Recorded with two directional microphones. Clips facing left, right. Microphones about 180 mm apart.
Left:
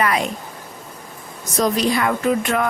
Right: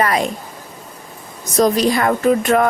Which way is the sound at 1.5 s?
40° right (ahead or behind).